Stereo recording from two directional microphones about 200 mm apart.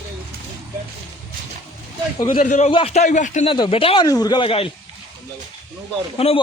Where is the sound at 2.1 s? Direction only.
25° left (ahead or behind).